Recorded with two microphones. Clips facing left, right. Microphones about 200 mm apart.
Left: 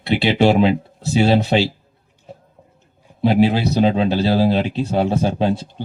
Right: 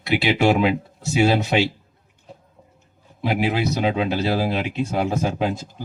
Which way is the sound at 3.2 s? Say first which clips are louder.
Left 6 dB; 30° left (ahead or behind).